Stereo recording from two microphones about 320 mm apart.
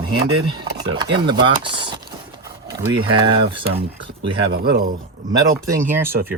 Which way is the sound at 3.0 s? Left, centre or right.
Centre.